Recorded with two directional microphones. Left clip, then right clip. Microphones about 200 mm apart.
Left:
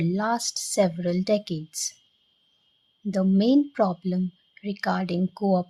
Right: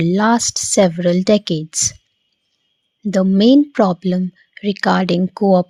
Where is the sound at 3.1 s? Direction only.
30° right (ahead or behind).